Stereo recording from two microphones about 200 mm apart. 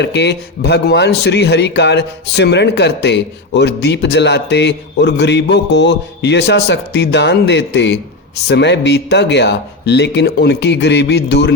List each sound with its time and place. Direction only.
0.0 s a man's voice: 60° left (ahead or behind)